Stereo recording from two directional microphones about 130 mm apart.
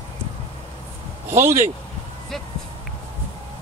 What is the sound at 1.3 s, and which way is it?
Speech, 20° right (ahead or behind).